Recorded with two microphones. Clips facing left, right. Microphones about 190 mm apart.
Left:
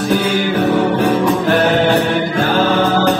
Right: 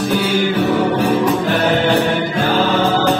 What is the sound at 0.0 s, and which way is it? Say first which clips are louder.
Music: left 1 dB; 50° left (ahead or behind).